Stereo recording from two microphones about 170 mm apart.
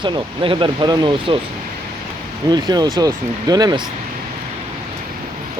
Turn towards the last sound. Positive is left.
turn(degrees=-25)  # may be behind; listen again after turning